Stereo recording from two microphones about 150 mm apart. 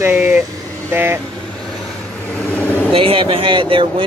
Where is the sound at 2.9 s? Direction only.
35° right (ahead or behind).